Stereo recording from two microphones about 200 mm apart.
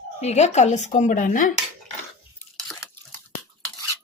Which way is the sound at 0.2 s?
35° left (ahead or behind).